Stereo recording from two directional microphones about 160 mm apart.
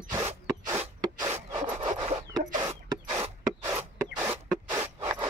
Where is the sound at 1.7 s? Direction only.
40° right (ahead or behind).